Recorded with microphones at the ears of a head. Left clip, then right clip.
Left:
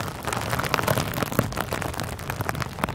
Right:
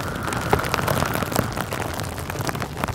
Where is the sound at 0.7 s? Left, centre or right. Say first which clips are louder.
Right 2 dB; centre.